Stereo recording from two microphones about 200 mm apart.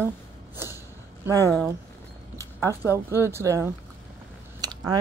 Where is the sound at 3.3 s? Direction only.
15° right (ahead or behind).